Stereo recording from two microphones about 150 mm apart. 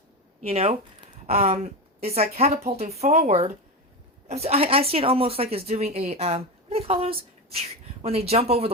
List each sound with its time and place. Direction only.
0.4 s speech: 45° right (ahead or behind)